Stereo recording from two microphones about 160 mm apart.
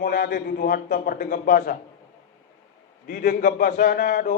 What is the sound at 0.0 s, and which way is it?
A man's voice, 70° left (ahead or behind).